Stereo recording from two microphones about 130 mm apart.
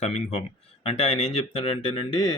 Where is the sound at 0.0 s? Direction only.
65° left (ahead or behind).